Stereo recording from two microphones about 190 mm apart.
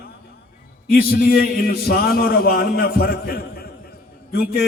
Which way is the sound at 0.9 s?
55° left (ahead or behind).